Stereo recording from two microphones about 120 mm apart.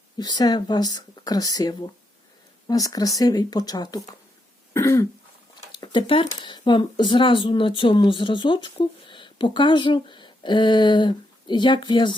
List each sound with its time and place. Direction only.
0.2 s speech: 35° left (ahead or behind)
4.7 s throat clearing: 25° left (ahead or behind)
5.7 s speech: 40° left (ahead or behind)